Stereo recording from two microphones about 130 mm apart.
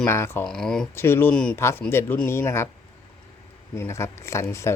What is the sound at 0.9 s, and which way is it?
Speech, 20° left (ahead or behind).